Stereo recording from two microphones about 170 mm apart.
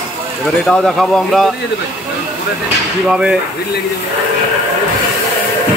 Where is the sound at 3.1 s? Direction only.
5° right (ahead or behind).